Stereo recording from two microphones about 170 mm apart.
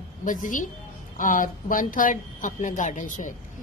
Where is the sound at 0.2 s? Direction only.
50° left (ahead or behind).